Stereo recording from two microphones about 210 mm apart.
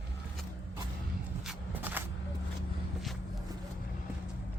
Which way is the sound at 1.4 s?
10° right (ahead or behind).